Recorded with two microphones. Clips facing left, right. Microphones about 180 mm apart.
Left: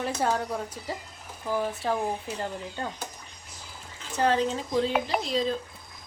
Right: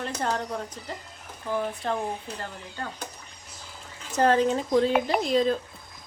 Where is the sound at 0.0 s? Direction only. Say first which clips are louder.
Left 2 dB; 10° left (ahead or behind).